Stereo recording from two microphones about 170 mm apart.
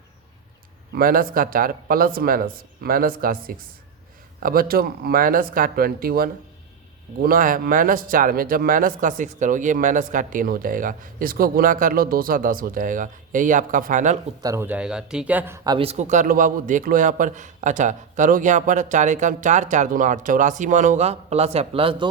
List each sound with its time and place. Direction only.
0.9 s speech: 60° right (ahead or behind)
14.4 s speech: 15° right (ahead or behind)
15.9 s speech: 45° right (ahead or behind); by 22.1 s 30° right (ahead or behind)